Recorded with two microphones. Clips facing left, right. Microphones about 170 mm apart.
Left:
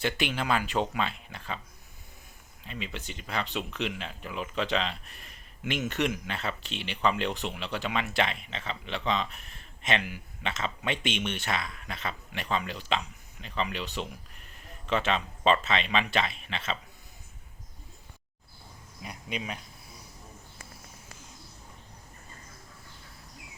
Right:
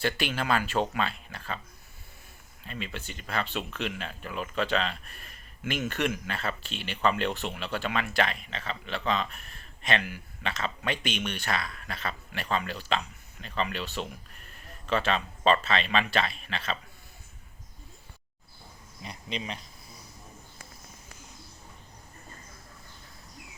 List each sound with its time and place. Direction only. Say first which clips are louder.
0.0 s speech: even; 20° left (ahead or behind)
2.6 s speech: even; 15° left (ahead or behind)
19.0 s speech: even; 5° left (ahead or behind)